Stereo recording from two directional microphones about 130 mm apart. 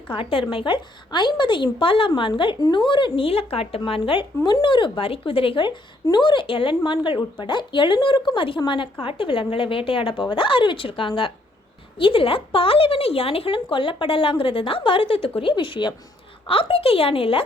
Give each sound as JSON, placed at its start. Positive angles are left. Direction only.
{"t": 0.1, "sound": "speech", "side_deg": 45}